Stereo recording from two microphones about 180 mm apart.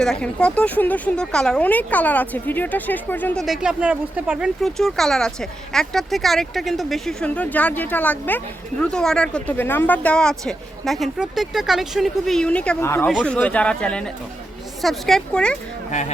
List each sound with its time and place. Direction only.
0.0 s speech: 5° left (ahead or behind)
3.4 s speech: 5° right (ahead or behind); by 13.1 s 15° left (ahead or behind)
13.1 s speech: 5° left (ahead or behind)
15.9 s speech: 40° left (ahead or behind)